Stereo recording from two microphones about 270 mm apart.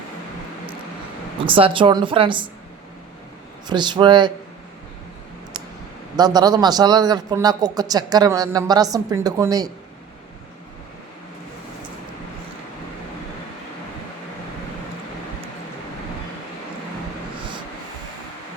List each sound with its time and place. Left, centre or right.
1.5 s a woman's voice: centre
3.7 s speech: centre
6.1 s speech: centre